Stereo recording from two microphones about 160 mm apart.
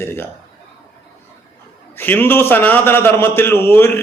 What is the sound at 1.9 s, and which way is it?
A man's voice, 15° left (ahead or behind).